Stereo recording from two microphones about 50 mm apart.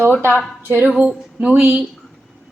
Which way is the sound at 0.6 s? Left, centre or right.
Right.